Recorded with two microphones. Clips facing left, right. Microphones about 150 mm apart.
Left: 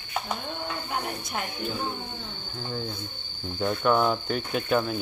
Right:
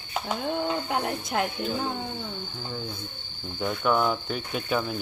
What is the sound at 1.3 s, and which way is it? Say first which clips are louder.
Speech: right 7 dB; 85° right.